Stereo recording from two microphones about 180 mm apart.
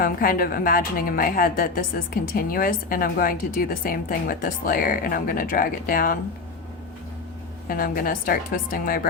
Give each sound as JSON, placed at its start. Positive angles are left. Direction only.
{"t": 0.0, "sound": "a woman's voice", "side_deg": 55}
{"t": 7.7, "sound": "a woman's voice", "side_deg": 55}